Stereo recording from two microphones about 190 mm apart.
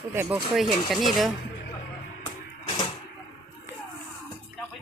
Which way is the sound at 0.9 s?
Centre (ahead or behind).